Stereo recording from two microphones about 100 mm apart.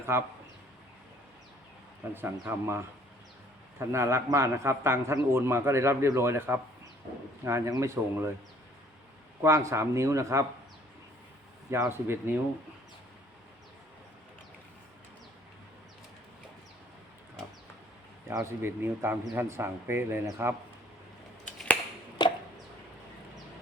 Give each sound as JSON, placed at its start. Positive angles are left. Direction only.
{"t": 0.1, "sound": "a man's voice", "side_deg": -25}
{"t": 2.1, "sound": "a man's voice", "side_deg": -20}
{"t": 9.4, "sound": "a man's voice", "side_deg": -30}
{"t": 11.7, "sound": "a man's voice", "side_deg": -25}
{"t": 18.3, "sound": "a man's voice", "side_deg": -25}
{"t": 22.2, "sound": "chopping", "side_deg": 45}